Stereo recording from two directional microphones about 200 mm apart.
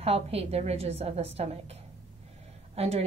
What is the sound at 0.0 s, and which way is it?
A woman's voice, 30° right (ahead or behind).